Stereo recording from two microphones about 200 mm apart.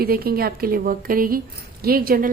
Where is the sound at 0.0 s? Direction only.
50° right (ahead or behind).